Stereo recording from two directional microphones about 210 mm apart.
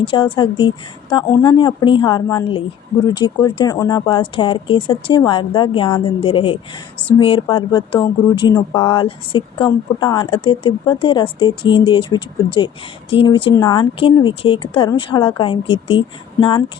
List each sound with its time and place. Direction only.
0.0 s speech: 25° left (ahead or behind)